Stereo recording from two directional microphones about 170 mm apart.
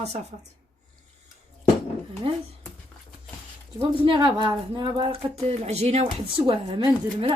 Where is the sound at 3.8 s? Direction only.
30° right (ahead or behind).